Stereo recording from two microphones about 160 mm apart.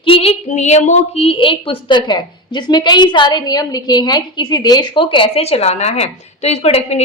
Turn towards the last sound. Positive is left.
turn(degrees=40)  # may be behind; listen again after turning